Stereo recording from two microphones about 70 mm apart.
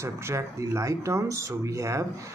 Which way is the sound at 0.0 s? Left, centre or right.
Right.